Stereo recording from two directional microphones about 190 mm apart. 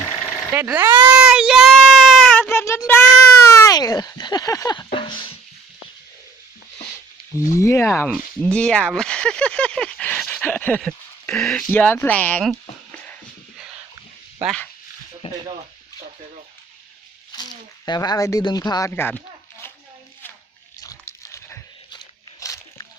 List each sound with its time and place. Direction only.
0.5 s a sound: 15° right (ahead or behind)
2.5 s child singing: 15° left (ahead or behind)
3.5 s speech: 20° left (ahead or behind)
7.6 s speech: 15° left (ahead or behind)
14.4 s speech: 5° left (ahead or behind)
15.2 s speech: 30° left (ahead or behind)
17.8 s speech: 20° left (ahead or behind)
20.8 s crunch: 15° left (ahead or behind)